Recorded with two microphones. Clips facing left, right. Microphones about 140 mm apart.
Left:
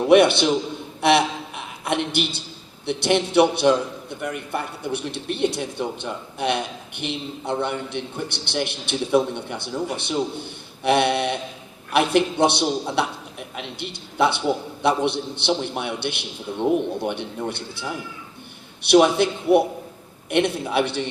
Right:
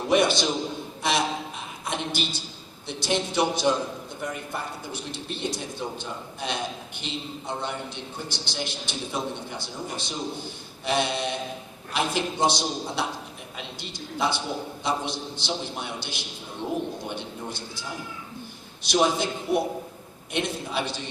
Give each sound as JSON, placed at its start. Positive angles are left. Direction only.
{"t": 0.1, "sound": "a man's voice", "side_deg": 60}